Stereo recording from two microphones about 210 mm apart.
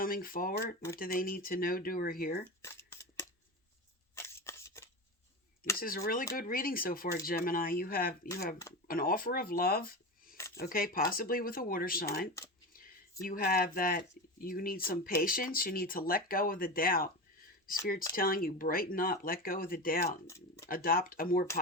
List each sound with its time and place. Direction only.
0.0 s speech: 40° left (ahead or behind)
2.6 s shuffling cards: 15° left (ahead or behind)
4.1 s scissors: 10° left (ahead or behind)
5.8 s speech: 40° left (ahead or behind)
10.3 s a sound: 15° left (ahead or behind)
10.6 s speech: 45° left (ahead or behind)
12.7 s a sound: 45° left (ahead or behind)
13.2 s speech: 45° left (ahead or behind)
18.1 s speech: 45° left (ahead or behind)
20.2 s a sound: 15° left (ahead or behind)
20.7 s speech: 45° left (ahead or behind)